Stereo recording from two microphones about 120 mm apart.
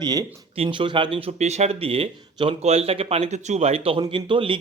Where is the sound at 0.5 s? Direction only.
50° right (ahead or behind).